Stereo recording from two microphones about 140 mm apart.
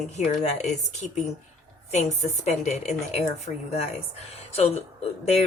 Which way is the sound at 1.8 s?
50° left (ahead or behind).